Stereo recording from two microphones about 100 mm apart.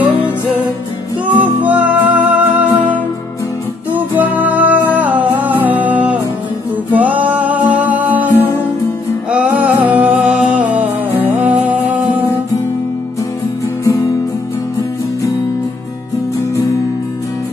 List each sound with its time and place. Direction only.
0.0 s music: 15° right (ahead or behind)
13.8 s music: 35° left (ahead or behind)